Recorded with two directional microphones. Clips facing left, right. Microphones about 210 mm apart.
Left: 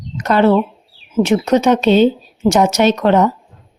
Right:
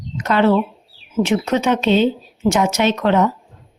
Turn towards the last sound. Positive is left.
turn(degrees=40)  # may be behind; listen again after turning